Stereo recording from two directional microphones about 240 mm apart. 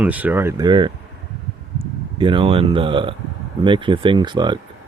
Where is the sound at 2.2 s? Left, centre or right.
Right.